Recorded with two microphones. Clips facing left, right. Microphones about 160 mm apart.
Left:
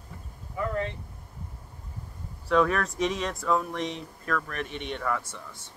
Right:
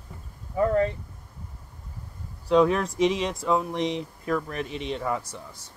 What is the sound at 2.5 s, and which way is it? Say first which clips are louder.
Speech: right 4 dB; 20° right (ahead or behind).